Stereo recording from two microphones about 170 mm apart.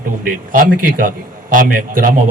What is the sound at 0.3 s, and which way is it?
A man's voice, 55° right (ahead or behind).